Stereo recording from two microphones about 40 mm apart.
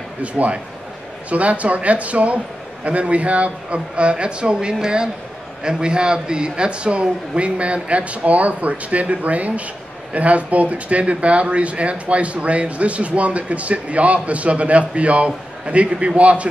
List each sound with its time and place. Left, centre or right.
0.2 s a man's voice: right